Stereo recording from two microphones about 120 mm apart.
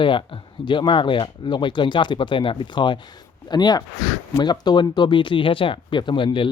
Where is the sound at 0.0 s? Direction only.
45° left (ahead or behind).